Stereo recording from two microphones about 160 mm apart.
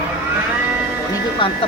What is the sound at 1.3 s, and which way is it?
Speech, 35° left (ahead or behind).